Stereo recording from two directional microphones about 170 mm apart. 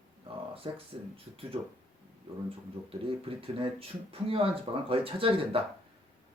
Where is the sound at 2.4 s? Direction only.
30° right (ahead or behind).